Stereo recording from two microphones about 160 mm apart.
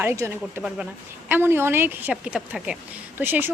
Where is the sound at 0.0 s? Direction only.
15° right (ahead or behind).